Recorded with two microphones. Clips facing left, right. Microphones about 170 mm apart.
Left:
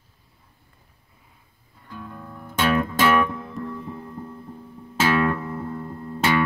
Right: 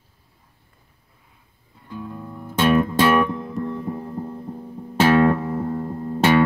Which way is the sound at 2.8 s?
25° right (ahead or behind).